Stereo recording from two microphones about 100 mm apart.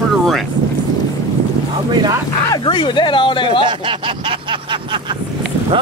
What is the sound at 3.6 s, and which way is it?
Speech, 60° right (ahead or behind).